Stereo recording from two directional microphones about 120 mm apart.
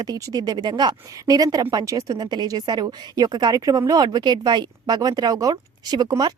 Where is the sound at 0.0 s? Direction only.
30° right (ahead or behind).